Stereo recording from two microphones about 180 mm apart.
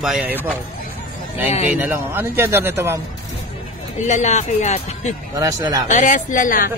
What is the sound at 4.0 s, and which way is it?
Speech, 40° left (ahead or behind).